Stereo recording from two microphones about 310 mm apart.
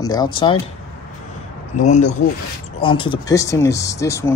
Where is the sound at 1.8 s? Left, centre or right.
Left.